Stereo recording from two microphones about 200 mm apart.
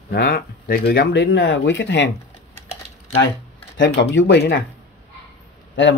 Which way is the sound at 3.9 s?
60° left (ahead or behind).